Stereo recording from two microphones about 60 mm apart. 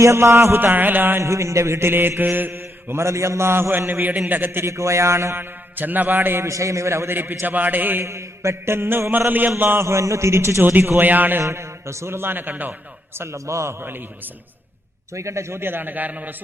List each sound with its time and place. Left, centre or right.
0.0 s mantra: right
0.6 s mantra: right
1.2 s mantra: right
4.7 s mantra: right
5.4 s mantra: right
6.5 s mantra: right
8.0 s mantra: right
9.8 s mantra: right
10.6 s mantra: right
11.4 s mantra: right
13.1 s mantra: right
15.1 s mantra: right